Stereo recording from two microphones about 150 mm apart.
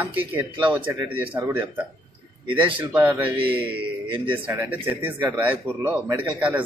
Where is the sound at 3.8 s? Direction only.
35° right (ahead or behind).